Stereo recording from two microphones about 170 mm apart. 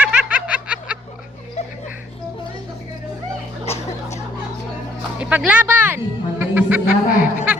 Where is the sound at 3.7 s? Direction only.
40° left (ahead or behind).